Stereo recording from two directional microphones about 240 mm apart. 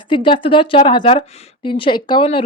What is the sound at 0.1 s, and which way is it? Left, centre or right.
Speech, left.